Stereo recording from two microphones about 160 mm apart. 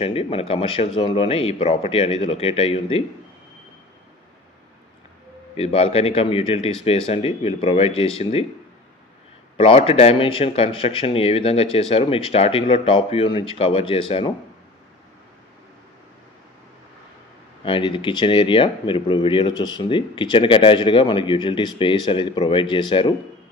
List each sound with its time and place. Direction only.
0.0 s speech: 35° left (ahead or behind)
5.6 s speech: 35° left (ahead or behind)
9.6 s speech: 35° left (ahead or behind)
17.6 s speech: 30° left (ahead or behind)